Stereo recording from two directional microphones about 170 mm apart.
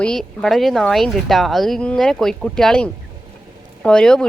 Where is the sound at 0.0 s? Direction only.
5° left (ahead or behind).